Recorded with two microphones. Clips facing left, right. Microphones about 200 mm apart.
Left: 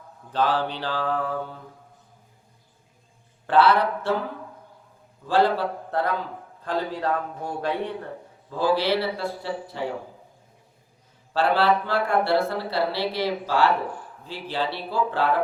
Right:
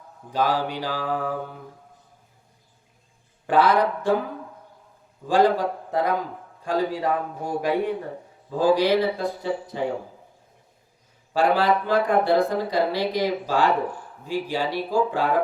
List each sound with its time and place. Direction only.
0.3 s speech: 10° right (ahead or behind)
3.4 s speech: 15° right (ahead or behind)
5.3 s speech: 15° right (ahead or behind)
11.3 s speech: 15° right (ahead or behind)